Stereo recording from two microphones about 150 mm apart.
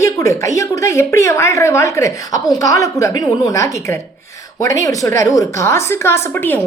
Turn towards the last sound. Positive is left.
turn(degrees=15)  # may be behind; listen again after turning